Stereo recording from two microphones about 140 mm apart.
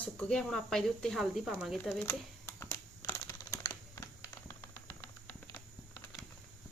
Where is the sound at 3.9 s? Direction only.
20° left (ahead or behind).